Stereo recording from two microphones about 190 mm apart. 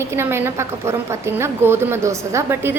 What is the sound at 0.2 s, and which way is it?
A woman's voice, 10° right (ahead or behind).